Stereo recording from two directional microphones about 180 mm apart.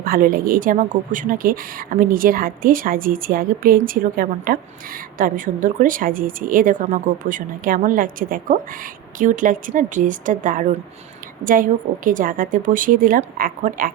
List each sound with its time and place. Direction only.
0.0 s speech: 50° right (ahead or behind)